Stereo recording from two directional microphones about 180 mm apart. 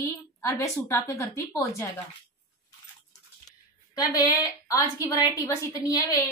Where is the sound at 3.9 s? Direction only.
20° left (ahead or behind).